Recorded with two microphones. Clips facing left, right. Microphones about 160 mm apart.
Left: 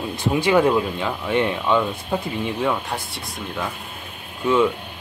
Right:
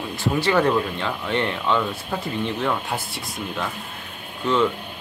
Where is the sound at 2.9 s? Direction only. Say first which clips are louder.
Right 1 dB; centre (ahead or behind).